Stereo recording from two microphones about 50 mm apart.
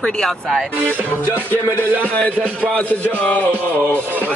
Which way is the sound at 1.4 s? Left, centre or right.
Left.